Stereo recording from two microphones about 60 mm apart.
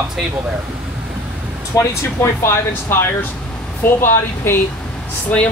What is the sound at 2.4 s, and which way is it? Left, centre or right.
Speech, left.